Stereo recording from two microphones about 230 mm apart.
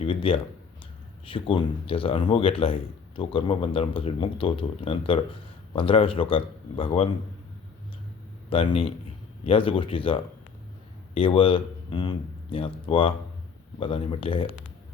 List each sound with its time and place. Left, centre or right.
0.0 s speech: left
8.4 s speech: left